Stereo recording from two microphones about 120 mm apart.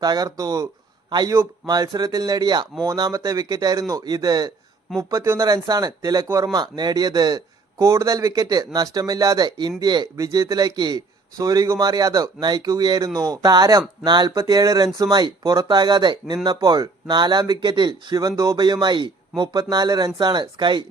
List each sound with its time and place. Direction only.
0.0 s speech: 35° right (ahead or behind)